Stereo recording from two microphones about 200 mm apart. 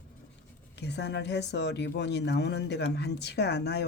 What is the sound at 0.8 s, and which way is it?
Speech, 60° left (ahead or behind).